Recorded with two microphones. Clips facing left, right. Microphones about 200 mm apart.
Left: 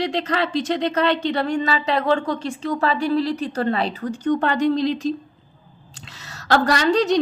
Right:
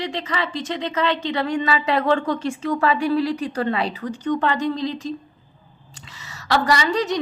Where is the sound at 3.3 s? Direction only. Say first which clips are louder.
Left 1 dB; 40° left (ahead or behind).